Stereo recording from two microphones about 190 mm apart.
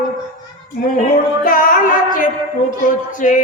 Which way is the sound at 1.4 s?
50° left (ahead or behind).